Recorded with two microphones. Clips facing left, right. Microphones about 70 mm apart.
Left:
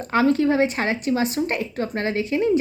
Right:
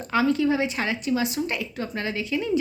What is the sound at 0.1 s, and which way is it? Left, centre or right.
A woman's voice, left.